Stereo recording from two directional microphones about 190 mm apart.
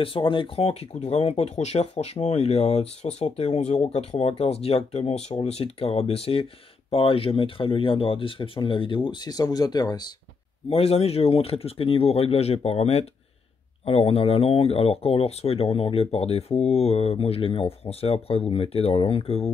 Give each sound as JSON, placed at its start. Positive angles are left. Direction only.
{"t": 0.0, "sound": "speech", "side_deg": 30}
{"t": 10.7, "sound": "speech", "side_deg": 30}